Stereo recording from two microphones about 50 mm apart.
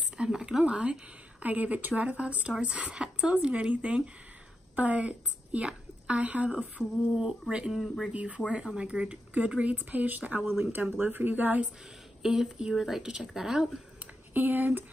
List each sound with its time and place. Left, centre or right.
0.2 s a woman's voice: centre
6.8 s speech: centre; by 11.7 s right
12.2 s speech: centre
14.3 s speech: right